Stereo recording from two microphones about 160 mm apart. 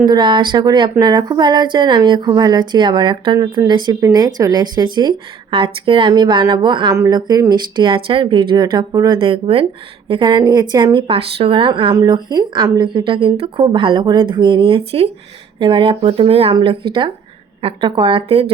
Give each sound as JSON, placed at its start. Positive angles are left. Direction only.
{"t": 0.1, "sound": "a woman's voice", "side_deg": -30}